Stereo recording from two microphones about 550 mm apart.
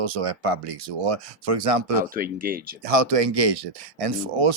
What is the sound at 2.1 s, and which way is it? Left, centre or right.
Speech, centre.